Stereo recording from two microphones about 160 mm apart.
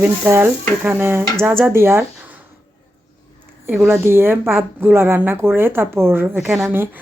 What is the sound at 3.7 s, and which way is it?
Speech, 10° right (ahead or behind).